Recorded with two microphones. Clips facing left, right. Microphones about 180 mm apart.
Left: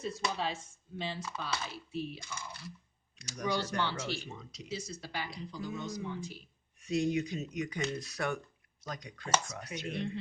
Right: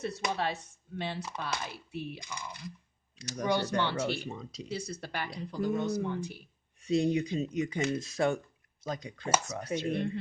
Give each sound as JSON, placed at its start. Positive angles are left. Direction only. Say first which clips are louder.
{"t": 0.0, "sound": "speech", "louder": "right 3 dB", "side_deg": -65}
{"t": 2.3, "sound": "speech", "louder": "right 3 dB", "side_deg": -15}
{"t": 3.4, "sound": "speech", "louder": "right 4 dB", "side_deg": -60}
{"t": 4.3, "sound": "speech", "louder": "right 6 dB", "side_deg": -35}
{"t": 4.7, "sound": "speech", "louder": "right 2 dB", "side_deg": -60}
{"t": 6.8, "sound": "speech", "louder": "right 3 dB", "side_deg": -30}